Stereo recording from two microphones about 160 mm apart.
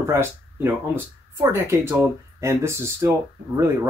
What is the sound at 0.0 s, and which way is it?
Speech, 15° right (ahead or behind).